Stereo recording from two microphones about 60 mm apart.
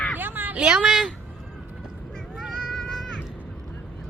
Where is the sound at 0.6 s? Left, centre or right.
Centre.